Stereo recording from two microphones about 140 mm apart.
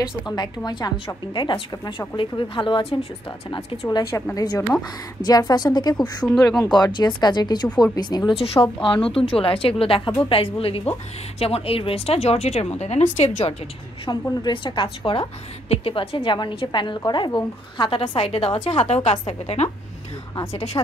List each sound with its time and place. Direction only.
0.7 s a woman's voice: 30° left (ahead or behind)
3.8 s speech: 20° left (ahead or behind)
6.2 s speech: 5° left (ahead or behind)
6.6 s a woman's voice: 30° left (ahead or behind)
8.8 s a woman's voice: 40° left (ahead or behind); by 13.4 s 60° left (ahead or behind)
14.0 s a woman's voice: 35° left (ahead or behind)
20.8 s speech: 30° left (ahead or behind)